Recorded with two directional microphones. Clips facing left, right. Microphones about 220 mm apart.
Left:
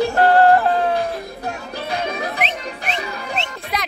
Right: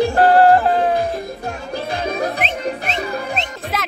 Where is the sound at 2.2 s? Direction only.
40° right (ahead or behind).